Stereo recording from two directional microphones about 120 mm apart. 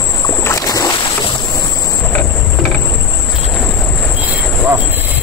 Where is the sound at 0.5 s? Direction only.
30° left (ahead or behind).